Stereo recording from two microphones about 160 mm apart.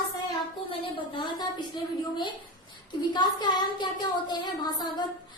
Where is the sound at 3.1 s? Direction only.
25° left (ahead or behind).